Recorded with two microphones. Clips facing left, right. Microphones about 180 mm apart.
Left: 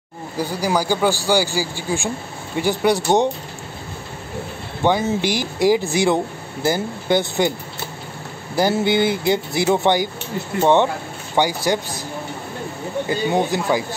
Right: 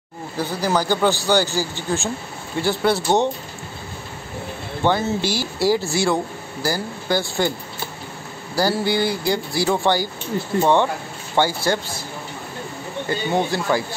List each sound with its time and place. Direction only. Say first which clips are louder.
0.4 s speech: left 1 dB; 10° left (ahead or behind)
4.8 s speech: left 2 dB; 15° left (ahead or behind)
8.5 s speech: left 3 dB; 20° left (ahead or behind)
13.3 s speech: even; 15° left (ahead or behind)